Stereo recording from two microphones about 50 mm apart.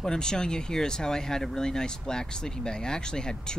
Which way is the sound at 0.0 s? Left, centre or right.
Centre.